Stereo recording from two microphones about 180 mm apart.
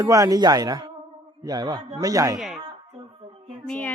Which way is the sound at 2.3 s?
Centre (ahead or behind).